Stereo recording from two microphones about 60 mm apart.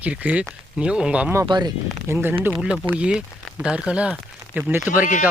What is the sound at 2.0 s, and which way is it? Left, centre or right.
Speech, right.